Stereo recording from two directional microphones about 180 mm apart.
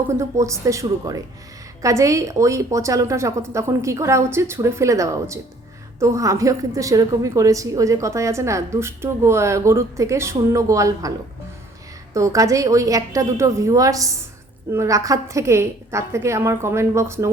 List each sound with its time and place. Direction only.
0.1 s a woman's voice: 15° right (ahead or behind)
12.1 s a woman's voice: 15° right (ahead or behind)